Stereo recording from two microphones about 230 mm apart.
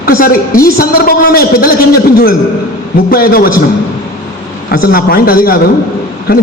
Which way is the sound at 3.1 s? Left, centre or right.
Left.